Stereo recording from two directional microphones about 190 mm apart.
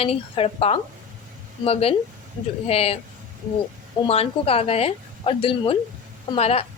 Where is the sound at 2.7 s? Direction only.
30° left (ahead or behind).